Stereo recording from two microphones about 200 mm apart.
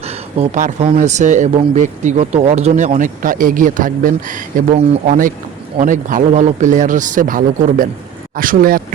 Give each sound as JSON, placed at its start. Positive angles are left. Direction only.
{"t": 0.0, "sound": "speech", "side_deg": -30}